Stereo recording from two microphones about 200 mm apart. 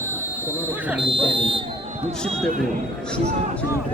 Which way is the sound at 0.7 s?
5° right (ahead or behind).